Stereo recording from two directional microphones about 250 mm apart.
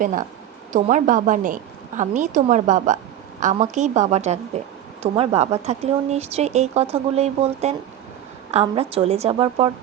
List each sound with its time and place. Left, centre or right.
0.0 s a woman's voice: right